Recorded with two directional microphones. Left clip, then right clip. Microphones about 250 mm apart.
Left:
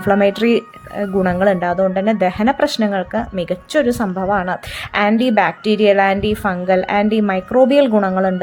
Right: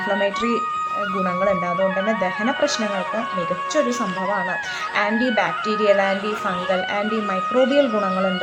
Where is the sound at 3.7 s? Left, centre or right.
Left.